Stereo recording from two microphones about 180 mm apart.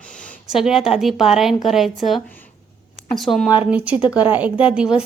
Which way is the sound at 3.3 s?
5° right (ahead or behind).